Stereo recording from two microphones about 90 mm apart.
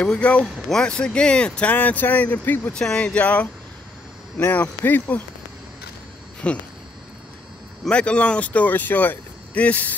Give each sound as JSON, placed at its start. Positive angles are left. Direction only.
{"t": 0.0, "sound": "speech", "side_deg": 10}
{"t": 6.4, "sound": "speech", "side_deg": 15}
{"t": 7.8, "sound": "speech", "side_deg": 10}